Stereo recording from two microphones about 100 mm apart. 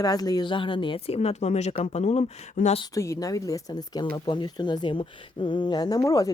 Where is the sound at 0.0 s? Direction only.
40° left (ahead or behind); by 2.8 s 90° left.